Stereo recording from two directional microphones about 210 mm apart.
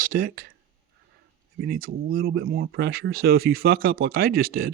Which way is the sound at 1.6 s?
45° right (ahead or behind).